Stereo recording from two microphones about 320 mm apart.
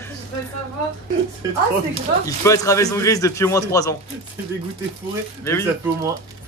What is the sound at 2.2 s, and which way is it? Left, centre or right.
Speech, centre.